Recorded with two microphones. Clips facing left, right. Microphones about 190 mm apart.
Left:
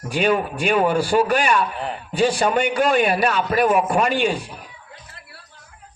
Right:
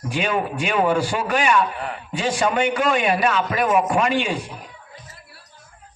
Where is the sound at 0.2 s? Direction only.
35° left (ahead or behind).